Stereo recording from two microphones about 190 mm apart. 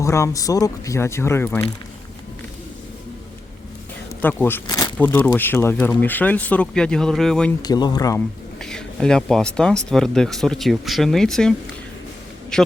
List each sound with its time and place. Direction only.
0.0 s speech: 15° left (ahead or behind)
4.2 s speech: 10° left (ahead or behind)
4.6 s speech: 20° left (ahead or behind)
4.9 s speech: 10° left (ahead or behind)
7.6 s speech: 20° left (ahead or behind)
8.6 s speech: 5° left (ahead or behind)
12.5 s speech: 5° left (ahead or behind)